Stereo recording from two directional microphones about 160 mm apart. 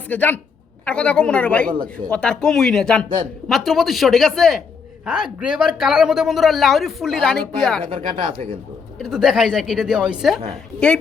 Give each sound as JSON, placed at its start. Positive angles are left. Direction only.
{"t": 0.1, "sound": "speech", "side_deg": 10}
{"t": 7.9, "sound": "speech", "side_deg": -35}
{"t": 9.0, "sound": "speech", "side_deg": 0}